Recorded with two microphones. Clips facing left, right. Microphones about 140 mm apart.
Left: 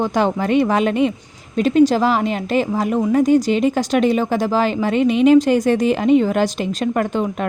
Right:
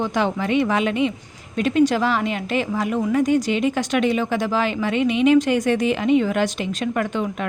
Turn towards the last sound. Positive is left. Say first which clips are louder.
# left 4 dB
turn(degrees=40)  # may be behind; listen again after turning